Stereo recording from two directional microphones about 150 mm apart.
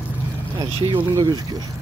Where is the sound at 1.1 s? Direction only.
25° right (ahead or behind).